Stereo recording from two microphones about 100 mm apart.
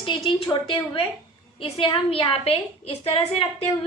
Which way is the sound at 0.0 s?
55° left (ahead or behind).